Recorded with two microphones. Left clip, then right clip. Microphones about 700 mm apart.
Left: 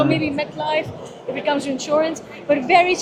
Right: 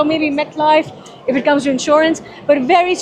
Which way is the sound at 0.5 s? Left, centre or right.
Right.